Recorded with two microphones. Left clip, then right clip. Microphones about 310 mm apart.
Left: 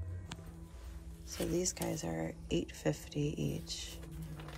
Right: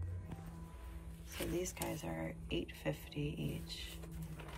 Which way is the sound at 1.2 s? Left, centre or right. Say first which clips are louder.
Left 5 dB; centre.